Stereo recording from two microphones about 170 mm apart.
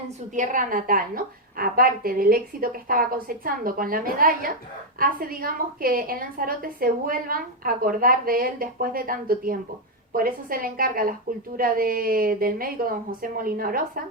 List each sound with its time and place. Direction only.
0.3 s a woman's voice: 50° right (ahead or behind)